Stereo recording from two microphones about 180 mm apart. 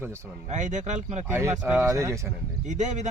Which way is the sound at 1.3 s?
15° right (ahead or behind).